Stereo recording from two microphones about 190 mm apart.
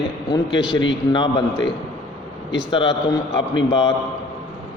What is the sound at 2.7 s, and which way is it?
A man's voice, 25° left (ahead or behind).